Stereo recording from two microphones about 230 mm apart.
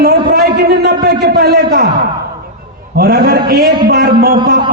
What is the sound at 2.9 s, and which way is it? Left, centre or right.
A man's voice, right.